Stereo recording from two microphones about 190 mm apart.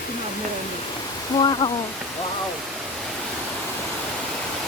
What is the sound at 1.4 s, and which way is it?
Speech, 25° left (ahead or behind).